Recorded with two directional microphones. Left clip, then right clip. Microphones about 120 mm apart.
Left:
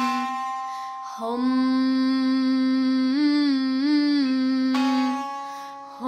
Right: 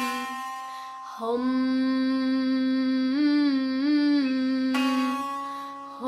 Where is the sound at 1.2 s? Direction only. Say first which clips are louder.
Left 2 dB; 20° left (ahead or behind).